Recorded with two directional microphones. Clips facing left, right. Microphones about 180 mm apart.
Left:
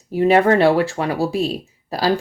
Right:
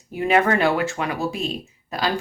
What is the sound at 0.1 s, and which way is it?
Speech, 35° left (ahead or behind).